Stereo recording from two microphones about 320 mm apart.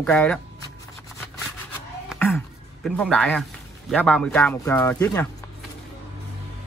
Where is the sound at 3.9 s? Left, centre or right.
Centre.